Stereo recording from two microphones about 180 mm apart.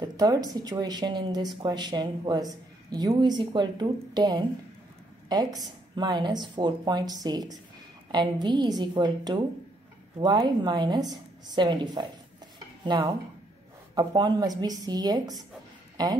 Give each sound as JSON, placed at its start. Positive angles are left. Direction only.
{"t": 0.0, "sound": "a sound", "side_deg": -20}
{"t": 0.6, "sound": "speech", "side_deg": -20}
{"t": 5.6, "sound": "speech", "side_deg": -25}